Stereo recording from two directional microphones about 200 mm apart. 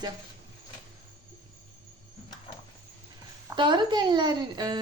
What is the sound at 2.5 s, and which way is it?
Dog, 30° left (ahead or behind).